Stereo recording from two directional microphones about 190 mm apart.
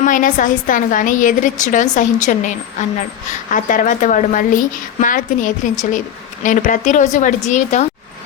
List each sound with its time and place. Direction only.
0.0 s a woman's voice: 40° left (ahead or behind)